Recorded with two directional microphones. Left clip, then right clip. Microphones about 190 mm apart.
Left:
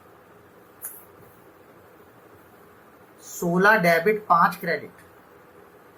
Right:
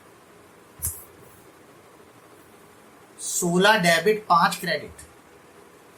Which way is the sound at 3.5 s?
20° right (ahead or behind).